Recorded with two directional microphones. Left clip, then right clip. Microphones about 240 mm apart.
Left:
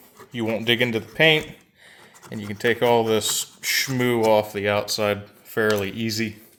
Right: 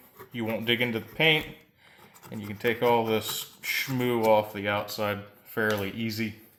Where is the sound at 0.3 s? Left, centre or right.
Left.